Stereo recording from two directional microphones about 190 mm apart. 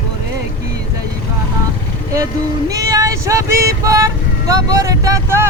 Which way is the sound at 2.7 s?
20° right (ahead or behind).